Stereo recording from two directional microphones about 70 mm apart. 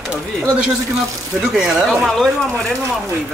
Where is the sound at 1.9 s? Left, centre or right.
Centre.